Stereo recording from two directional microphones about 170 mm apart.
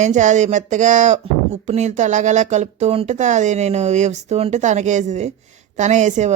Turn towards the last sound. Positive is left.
turn(degrees=-45)  # may be behind; listen again after turning